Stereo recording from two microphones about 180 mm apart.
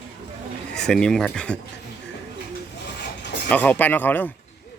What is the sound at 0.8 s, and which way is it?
Speech, 5° left (ahead or behind).